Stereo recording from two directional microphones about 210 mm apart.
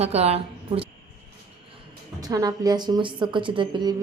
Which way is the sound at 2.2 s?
15° right (ahead or behind).